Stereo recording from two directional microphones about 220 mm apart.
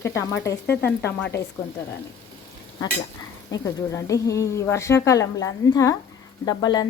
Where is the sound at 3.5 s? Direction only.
15° left (ahead or behind).